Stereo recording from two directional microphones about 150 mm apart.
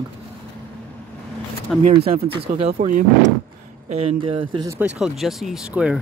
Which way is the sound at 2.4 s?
45° right (ahead or behind).